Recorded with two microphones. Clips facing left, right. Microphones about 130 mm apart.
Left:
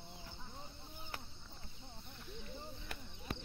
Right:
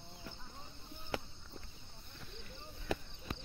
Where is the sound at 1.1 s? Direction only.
90° right.